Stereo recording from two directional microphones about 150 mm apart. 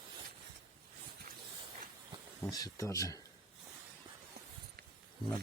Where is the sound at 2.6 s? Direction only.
25° left (ahead or behind).